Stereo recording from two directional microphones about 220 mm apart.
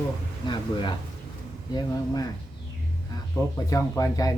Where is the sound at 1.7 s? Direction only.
20° left (ahead or behind).